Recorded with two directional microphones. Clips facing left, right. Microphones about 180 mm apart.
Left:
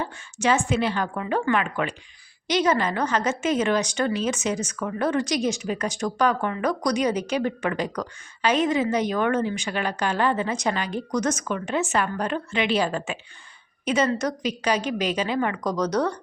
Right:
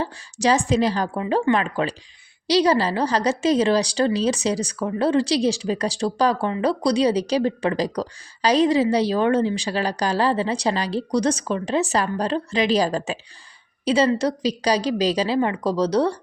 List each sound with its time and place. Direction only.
0.0 s speech: 35° right (ahead or behind)